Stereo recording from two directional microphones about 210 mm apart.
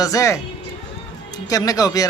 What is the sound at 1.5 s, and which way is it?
Speech, 15° left (ahead or behind).